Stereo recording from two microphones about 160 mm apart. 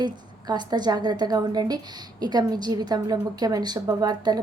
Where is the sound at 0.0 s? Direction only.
25° right (ahead or behind).